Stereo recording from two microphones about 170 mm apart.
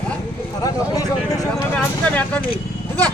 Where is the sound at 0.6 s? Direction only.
20° left (ahead or behind).